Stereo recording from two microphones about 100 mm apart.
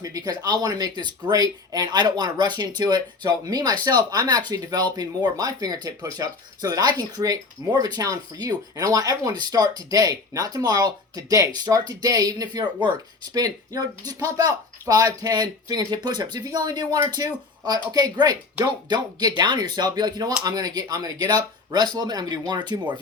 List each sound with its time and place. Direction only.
0.0 s speech: 40° right (ahead or behind)